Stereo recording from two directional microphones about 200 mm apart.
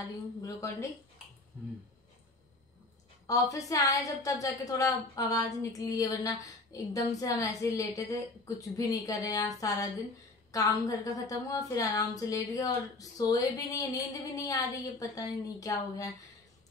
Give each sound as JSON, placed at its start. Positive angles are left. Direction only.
{"t": 0.4, "sound": "a woman's voice", "side_deg": 15}
{"t": 3.3, "sound": "a woman's voice", "side_deg": 15}